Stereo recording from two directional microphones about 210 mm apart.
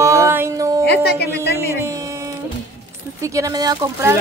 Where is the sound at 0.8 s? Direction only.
50° left (ahead or behind).